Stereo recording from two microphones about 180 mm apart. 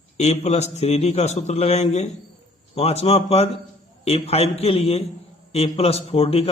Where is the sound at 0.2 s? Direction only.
35° left (ahead or behind).